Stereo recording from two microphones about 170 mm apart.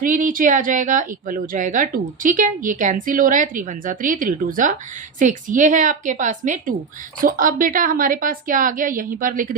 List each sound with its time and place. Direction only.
0.0 s a woman's voice: 50° right (ahead or behind)